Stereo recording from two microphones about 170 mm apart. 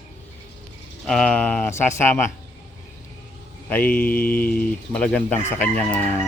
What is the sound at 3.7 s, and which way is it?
Speech, 10° left (ahead or behind).